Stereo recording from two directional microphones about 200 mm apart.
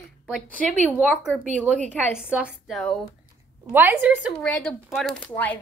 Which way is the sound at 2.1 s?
5° right (ahead or behind).